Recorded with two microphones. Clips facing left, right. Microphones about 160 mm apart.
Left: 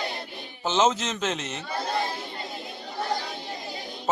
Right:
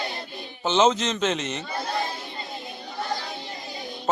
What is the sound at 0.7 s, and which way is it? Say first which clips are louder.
Speech: right 3 dB; 5° left (ahead or behind).